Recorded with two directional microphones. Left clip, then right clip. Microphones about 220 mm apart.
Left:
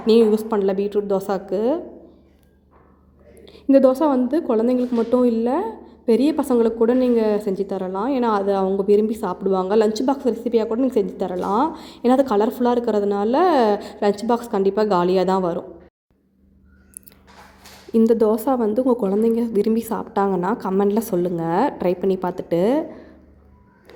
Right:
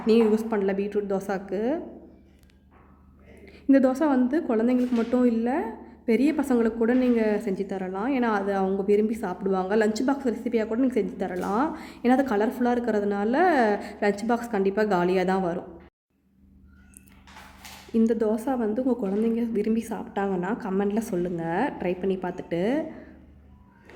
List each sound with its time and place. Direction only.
0.3 s a woman's voice: 10° left (ahead or behind)
3.4 s a woman's voice: 5° left (ahead or behind)
17.9 s a woman's voice: 15° left (ahead or behind)